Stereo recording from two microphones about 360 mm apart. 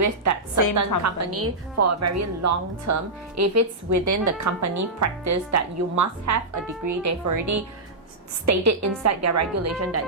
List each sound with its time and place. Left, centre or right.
0.0 s a woman's voice: right